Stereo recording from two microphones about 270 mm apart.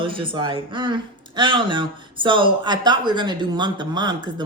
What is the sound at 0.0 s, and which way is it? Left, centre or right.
Speech, centre.